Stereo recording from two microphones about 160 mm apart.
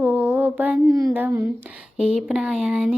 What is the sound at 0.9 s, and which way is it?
A child's voice, 20° right (ahead or behind).